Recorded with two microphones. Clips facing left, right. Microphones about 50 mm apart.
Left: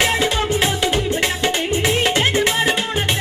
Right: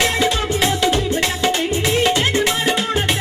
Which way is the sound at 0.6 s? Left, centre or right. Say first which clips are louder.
Right 1 dB; centre.